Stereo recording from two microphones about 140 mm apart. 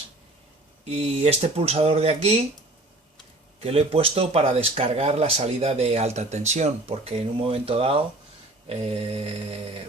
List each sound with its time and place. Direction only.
0.9 s speech: 50° right (ahead or behind)
3.6 s speech: 45° right (ahead or behind)
8.7 s mantra: 40° right (ahead or behind)